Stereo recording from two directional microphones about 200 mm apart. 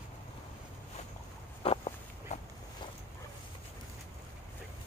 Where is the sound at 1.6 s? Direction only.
30° left (ahead or behind).